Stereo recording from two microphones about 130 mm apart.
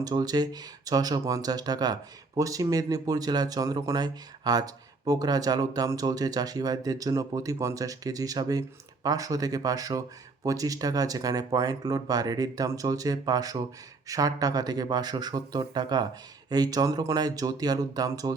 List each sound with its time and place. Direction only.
0.0 s speech: 30° right (ahead or behind)